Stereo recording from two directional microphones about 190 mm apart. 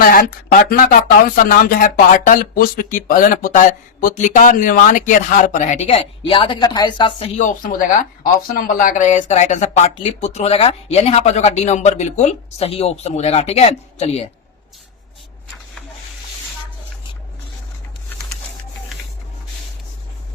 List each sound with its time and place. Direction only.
0.0 s speech: 50° left (ahead or behind); by 14.3 s 35° left (ahead or behind)